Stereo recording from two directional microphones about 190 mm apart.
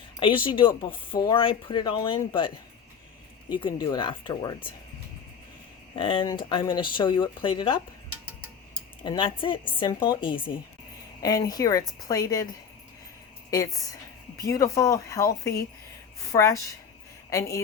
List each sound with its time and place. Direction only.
0.2 s speech: 25° left (ahead or behind)
3.5 s speech: 25° left (ahead or behind)
6.0 s speech: 25° left (ahead or behind)
9.0 s speech: 25° left (ahead or behind)
14.4 s speech: 15° left (ahead or behind)